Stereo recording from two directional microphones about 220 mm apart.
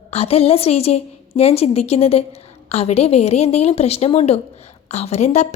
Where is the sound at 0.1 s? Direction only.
25° left (ahead or behind).